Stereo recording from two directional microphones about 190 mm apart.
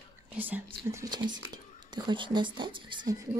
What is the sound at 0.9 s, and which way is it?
Speech, 25° right (ahead or behind).